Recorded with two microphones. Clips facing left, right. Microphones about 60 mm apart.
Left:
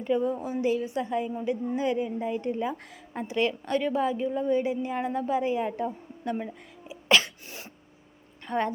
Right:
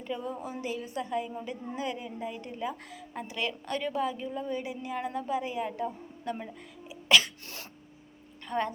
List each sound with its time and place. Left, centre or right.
0.0 s a woman's voice: centre
0.6 s a woman's voice: left
6.3 s a woman's voice: centre
6.8 s sneeze: left
7.4 s cough: centre
8.4 s a woman's voice: left